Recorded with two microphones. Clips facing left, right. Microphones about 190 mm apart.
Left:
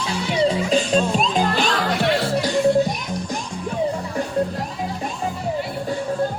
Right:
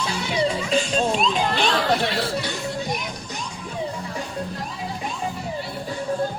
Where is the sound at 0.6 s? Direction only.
40° left (ahead or behind).